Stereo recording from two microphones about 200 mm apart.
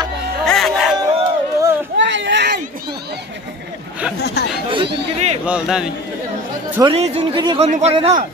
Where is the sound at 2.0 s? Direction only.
65° right (ahead or behind).